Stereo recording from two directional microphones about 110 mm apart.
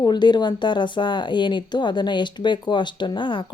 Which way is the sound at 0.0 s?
40° left (ahead or behind).